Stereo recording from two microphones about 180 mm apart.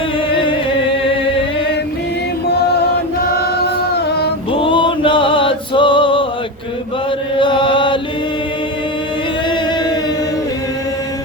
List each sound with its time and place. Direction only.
0.3 s music: 30° left (ahead or behind)
3.6 s singing: 65° left (ahead or behind)
4.5 s music: 30° left (ahead or behind)
7.3 s chant: 25° left (ahead or behind)